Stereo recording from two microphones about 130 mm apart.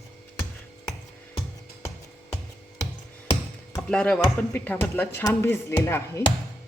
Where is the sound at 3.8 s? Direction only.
5° left (ahead or behind).